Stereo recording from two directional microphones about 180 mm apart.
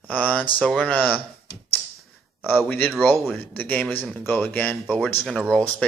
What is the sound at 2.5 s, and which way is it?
Speech, 10° left (ahead or behind).